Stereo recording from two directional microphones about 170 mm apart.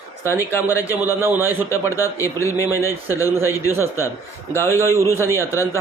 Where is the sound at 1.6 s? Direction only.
20° left (ahead or behind).